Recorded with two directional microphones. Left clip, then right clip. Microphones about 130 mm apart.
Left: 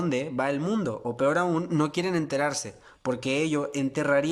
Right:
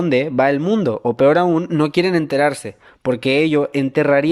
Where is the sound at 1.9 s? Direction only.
30° right (ahead or behind).